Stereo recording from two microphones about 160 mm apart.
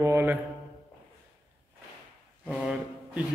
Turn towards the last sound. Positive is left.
turn(degrees=-5)  # may be behind; listen again after turning